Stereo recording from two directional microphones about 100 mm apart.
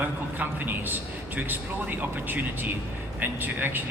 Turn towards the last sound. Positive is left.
turn(degrees=-20)  # may be behind; listen again after turning